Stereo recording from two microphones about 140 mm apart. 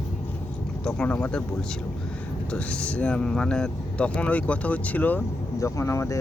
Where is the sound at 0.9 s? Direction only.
10° left (ahead or behind).